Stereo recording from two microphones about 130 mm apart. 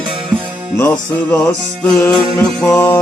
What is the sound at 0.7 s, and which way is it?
Music, 20° left (ahead or behind).